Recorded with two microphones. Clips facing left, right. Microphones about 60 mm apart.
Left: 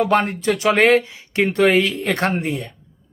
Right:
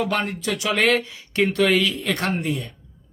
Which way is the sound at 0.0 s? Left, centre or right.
Left.